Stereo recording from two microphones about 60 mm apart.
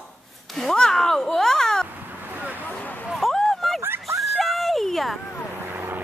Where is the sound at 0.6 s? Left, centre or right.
Centre.